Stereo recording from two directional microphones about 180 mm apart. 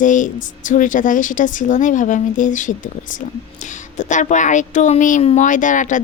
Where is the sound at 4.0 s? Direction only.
40° left (ahead or behind).